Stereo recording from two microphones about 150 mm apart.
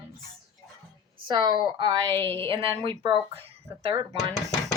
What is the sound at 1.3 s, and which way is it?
Speech, 30° right (ahead or behind).